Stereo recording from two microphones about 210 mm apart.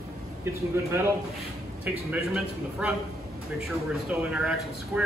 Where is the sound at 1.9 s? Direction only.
5° right (ahead or behind).